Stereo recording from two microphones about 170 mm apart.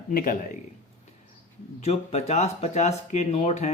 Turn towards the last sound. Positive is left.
turn(degrees=40)  # may be behind; listen again after turning